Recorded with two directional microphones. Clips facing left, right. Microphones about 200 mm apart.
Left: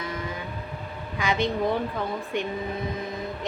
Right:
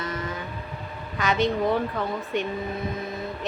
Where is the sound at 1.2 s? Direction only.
10° left (ahead or behind).